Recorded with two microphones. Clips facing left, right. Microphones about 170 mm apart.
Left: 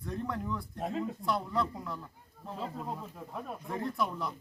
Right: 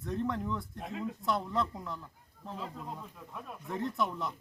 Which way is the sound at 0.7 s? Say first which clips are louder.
Left 6 dB; 40° left (ahead or behind).